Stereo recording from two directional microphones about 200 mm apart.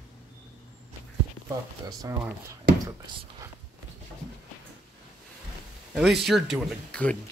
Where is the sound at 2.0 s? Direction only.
15° right (ahead or behind).